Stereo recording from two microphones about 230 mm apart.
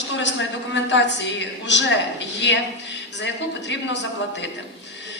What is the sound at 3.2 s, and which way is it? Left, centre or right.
Speech, left.